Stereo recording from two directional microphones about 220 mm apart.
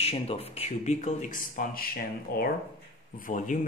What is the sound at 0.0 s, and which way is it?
Speech, 25° left (ahead or behind).